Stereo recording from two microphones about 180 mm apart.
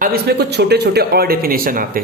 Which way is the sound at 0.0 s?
60° right (ahead or behind).